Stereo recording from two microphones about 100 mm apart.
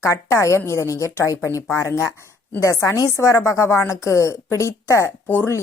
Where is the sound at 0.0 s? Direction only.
30° left (ahead or behind).